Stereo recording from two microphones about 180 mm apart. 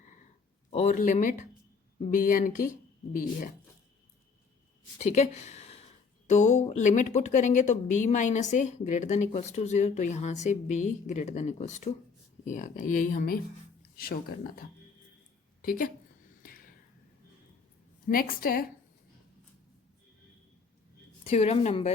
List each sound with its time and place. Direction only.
0.7 s speech: 35° left (ahead or behind)
4.9 s speech: 40° left (ahead or behind)
15.6 s speech: 50° left (ahead or behind)
16.4 s a sound: 55° left (ahead or behind)
18.1 s speech: 50° left (ahead or behind)
21.2 s speech: 35° left (ahead or behind)